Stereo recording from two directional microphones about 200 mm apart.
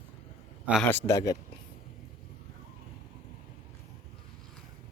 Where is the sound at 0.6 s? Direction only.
5° right (ahead or behind).